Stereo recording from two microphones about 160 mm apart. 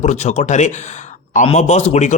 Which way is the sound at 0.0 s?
45° left (ahead or behind).